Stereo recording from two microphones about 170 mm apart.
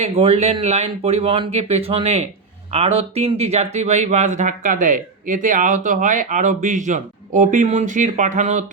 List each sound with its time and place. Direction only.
0.0 s speech: 40° right (ahead or behind)